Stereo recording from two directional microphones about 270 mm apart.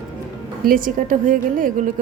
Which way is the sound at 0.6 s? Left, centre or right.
Right.